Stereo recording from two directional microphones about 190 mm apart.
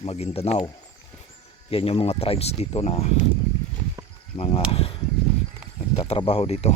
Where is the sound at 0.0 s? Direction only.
30° left (ahead or behind).